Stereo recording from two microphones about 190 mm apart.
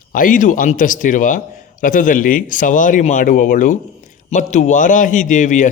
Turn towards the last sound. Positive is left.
turn(degrees=40)  # may be behind; listen again after turning